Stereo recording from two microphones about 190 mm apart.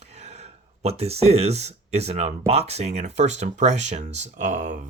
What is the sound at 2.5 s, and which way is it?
Speech, 35° right (ahead or behind).